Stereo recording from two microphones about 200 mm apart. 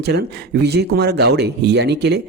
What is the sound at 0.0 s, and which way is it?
Speech, 55° right (ahead or behind).